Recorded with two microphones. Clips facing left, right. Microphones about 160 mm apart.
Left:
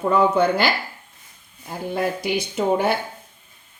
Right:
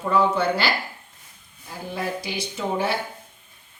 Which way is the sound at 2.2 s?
55° left (ahead or behind).